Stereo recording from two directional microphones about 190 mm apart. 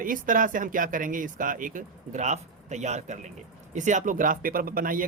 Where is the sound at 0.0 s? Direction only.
45° right (ahead or behind).